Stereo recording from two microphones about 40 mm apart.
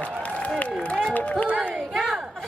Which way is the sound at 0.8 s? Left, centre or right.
Left.